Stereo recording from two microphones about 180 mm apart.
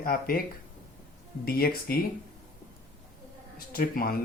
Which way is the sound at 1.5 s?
55° left (ahead or behind).